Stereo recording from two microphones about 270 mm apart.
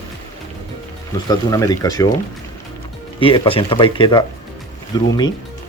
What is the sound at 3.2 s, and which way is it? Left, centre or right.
Speech, centre.